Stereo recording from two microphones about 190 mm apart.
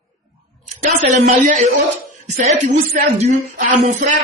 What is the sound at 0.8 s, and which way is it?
A woman's voice, 40° right (ahead or behind).